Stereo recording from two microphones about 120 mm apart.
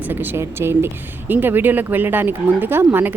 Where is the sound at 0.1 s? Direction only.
15° right (ahead or behind).